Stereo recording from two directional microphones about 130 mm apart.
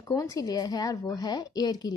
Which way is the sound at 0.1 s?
25° left (ahead or behind).